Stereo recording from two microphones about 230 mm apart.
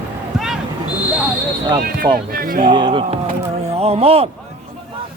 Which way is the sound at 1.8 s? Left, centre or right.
Right.